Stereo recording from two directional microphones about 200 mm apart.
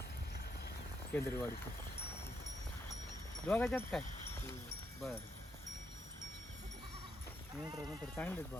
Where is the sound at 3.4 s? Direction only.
10° left (ahead or behind).